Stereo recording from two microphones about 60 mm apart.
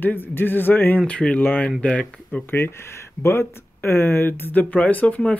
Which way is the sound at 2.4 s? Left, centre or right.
Left.